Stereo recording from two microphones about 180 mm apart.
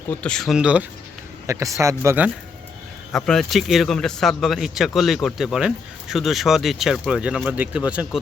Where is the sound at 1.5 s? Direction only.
15° right (ahead or behind).